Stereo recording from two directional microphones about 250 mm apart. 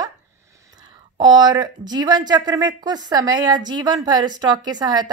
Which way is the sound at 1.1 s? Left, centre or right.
Centre.